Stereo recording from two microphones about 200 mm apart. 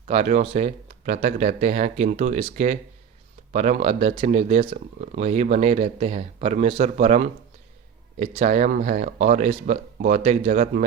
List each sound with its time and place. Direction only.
0.0 s speech: 35° right (ahead or behind)